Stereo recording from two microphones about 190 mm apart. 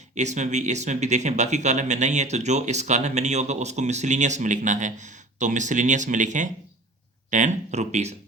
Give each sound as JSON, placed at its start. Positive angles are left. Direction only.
{"t": 0.1, "sound": "speech", "side_deg": -40}